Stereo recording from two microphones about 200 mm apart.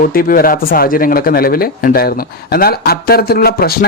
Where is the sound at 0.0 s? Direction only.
45° left (ahead or behind).